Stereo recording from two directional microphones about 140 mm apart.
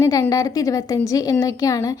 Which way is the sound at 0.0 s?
25° left (ahead or behind).